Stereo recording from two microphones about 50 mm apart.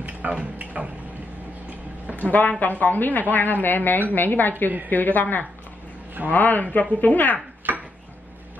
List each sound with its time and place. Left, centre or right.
0.3 s speech: right
2.1 s a woman's voice: left
7.7 s a sound: right